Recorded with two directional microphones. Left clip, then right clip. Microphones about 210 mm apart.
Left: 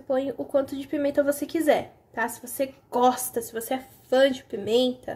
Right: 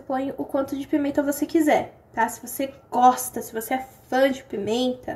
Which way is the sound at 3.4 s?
25° right (ahead or behind).